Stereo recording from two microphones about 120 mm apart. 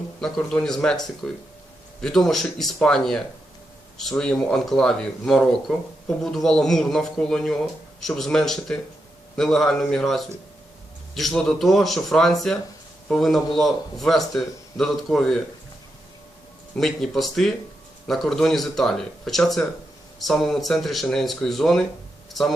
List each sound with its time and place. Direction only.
0.2 s speech: 5° left (ahead or behind)
16.7 s speech: 5° left (ahead or behind)